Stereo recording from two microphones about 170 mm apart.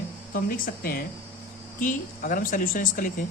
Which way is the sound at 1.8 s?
50° left (ahead or behind).